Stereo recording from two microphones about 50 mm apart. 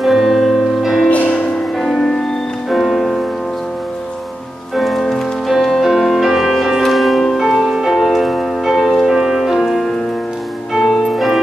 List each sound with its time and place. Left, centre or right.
0.0 s music: centre
1.0 s music: left
2.0 s music: centre
4.7 s music: centre